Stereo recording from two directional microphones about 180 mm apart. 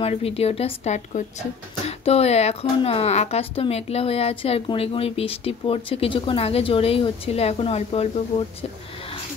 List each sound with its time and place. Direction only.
0.0 s a woman's voice: 35° left (ahead or behind)